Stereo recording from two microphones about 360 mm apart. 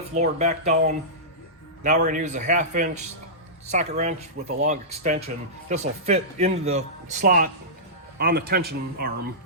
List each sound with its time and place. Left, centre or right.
0.1 s a man's voice: centre
1.8 s a man's voice: centre